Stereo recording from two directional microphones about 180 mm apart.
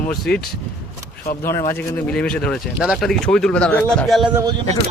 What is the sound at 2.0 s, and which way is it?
Speech, 5° left (ahead or behind).